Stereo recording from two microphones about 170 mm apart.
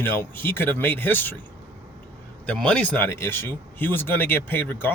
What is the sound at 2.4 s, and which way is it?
Speech, 5° left (ahead or behind).